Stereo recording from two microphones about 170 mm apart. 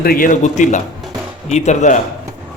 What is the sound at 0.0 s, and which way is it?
Speech, 60° left (ahead or behind).